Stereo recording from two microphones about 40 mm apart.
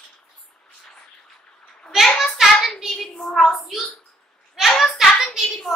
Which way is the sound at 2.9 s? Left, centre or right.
Centre.